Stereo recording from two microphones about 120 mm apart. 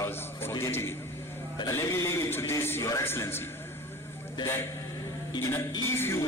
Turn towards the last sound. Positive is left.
turn(degrees=20)  # may be behind; listen again after turning